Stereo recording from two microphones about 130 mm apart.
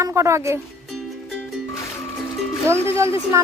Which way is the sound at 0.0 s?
20° right (ahead or behind).